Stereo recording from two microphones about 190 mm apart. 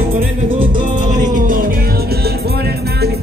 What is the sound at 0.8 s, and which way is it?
Music, 40° right (ahead or behind).